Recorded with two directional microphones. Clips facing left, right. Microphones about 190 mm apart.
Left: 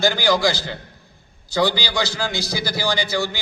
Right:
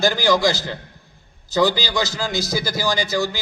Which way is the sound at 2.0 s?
45° right (ahead or behind).